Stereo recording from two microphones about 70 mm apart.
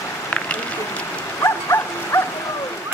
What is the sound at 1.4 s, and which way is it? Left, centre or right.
Dog, left.